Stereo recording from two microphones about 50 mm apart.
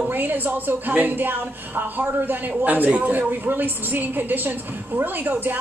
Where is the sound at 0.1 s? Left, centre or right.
Right.